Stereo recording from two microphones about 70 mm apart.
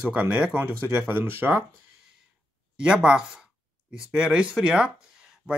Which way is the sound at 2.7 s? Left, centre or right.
Centre.